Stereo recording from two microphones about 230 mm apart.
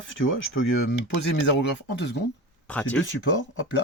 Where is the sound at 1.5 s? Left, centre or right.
Left.